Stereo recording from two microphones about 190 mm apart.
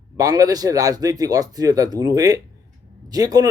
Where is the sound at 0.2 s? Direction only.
20° right (ahead or behind).